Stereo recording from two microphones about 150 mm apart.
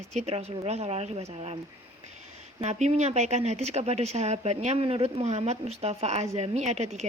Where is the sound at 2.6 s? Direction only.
45° right (ahead or behind).